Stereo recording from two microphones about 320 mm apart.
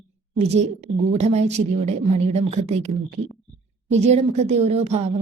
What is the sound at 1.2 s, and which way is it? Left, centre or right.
A woman's voice, centre.